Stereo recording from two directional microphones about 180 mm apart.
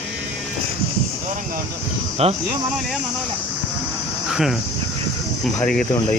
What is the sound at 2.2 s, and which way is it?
Speech, 35° right (ahead or behind).